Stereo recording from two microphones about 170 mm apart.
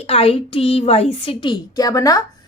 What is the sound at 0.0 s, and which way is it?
A woman's voice, 35° left (ahead or behind).